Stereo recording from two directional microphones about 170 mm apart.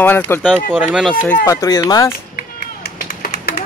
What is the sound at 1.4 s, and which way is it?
Speech, 15° left (ahead or behind).